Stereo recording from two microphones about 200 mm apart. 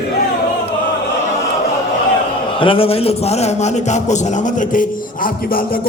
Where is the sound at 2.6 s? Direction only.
25° left (ahead or behind).